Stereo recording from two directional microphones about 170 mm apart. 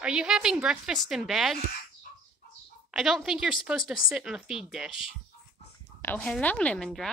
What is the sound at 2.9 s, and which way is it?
Speech, centre (ahead or behind).